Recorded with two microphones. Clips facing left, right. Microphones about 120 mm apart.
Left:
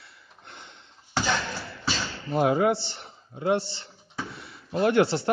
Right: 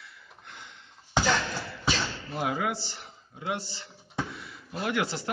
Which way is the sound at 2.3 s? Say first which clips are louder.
Left 9 dB; 35° left (ahead or behind).